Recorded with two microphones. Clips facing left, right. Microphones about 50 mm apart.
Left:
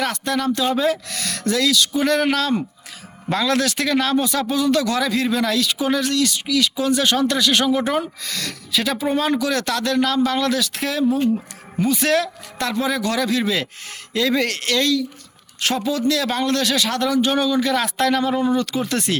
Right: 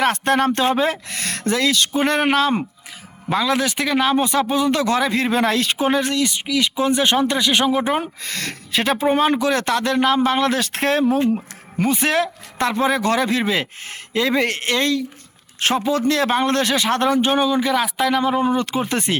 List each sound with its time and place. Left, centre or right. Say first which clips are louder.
0.0 s speech: right 4 dB; right
3.2 s speech: even; centre
8.2 s speech: right 1 dB; right
11.9 s speech: even; right
17.7 s speech: even; centre; by 19.2 s right